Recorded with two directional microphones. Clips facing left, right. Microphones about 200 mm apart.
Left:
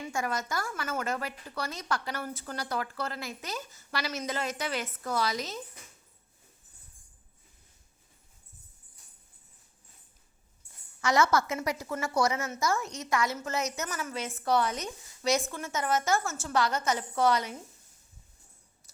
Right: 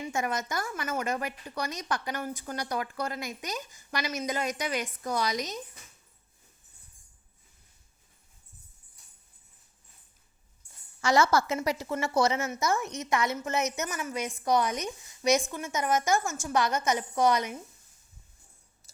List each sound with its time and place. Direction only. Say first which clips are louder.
0.0 s a woman's voice: right 2 dB; 20° right (ahead or behind)
11.0 s a woman's voice: right 2 dB; 30° right (ahead or behind)